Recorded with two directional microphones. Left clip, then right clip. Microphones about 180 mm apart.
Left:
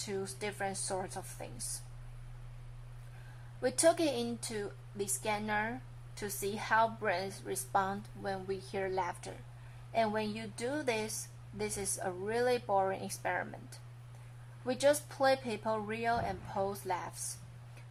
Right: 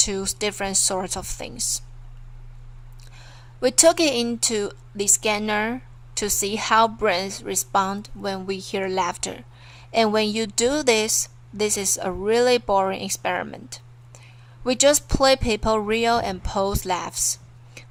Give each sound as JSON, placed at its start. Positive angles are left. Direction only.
{"t": 0.0, "sound": "speech", "side_deg": -30}
{"t": 3.6, "sound": "speech", "side_deg": -25}